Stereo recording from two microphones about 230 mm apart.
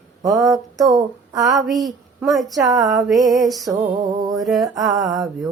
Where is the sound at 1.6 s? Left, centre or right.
Centre.